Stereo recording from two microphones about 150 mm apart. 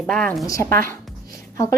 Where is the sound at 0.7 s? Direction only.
70° right (ahead or behind).